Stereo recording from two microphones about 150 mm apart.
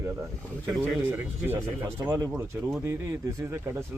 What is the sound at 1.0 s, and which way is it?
Speech, 15° right (ahead or behind).